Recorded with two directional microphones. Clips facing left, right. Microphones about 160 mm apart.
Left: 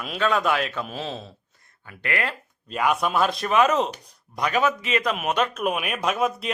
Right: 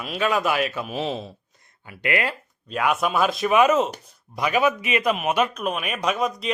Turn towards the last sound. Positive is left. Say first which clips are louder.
# even
turn(degrees=5)  # may be behind; listen again after turning